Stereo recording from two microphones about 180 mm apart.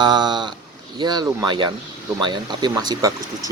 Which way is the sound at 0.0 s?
25° right (ahead or behind).